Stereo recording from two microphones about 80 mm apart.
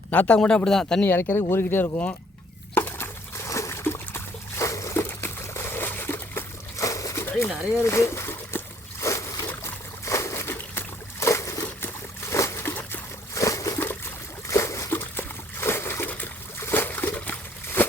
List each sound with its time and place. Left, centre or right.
0.1 s speech: centre
1.0 s speech: left
2.7 s trickle: left
6.8 s a sound: left
7.3 s pigeon: left
7.9 s splash: left
9.5 s boat: left
13.3 s a sound: left
14.4 s water: left